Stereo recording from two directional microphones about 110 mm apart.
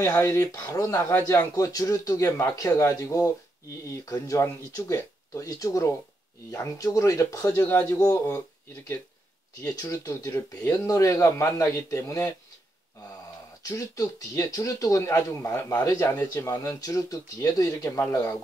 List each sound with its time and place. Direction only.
0.2 s speech: 30° left (ahead or behind)
7.6 s speech: 20° left (ahead or behind)
9.6 s speech: 30° left (ahead or behind)
13.6 s speech: 30° left (ahead or behind)